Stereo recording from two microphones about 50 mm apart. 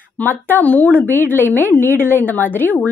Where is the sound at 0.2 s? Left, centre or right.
Left.